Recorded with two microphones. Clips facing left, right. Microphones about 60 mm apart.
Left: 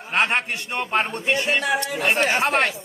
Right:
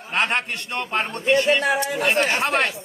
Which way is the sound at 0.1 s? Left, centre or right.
Centre.